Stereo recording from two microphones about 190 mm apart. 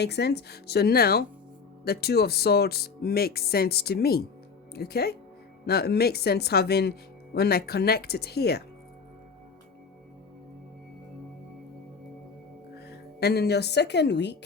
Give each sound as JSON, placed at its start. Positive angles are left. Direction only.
{"t": 0.0, "sound": "speech", "side_deg": 60}
{"t": 12.7, "sound": "speech", "side_deg": 60}